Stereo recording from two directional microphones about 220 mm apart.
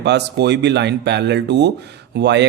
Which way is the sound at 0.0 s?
50° right (ahead or behind).